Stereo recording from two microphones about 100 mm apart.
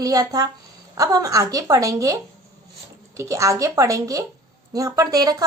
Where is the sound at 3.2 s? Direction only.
30° right (ahead or behind).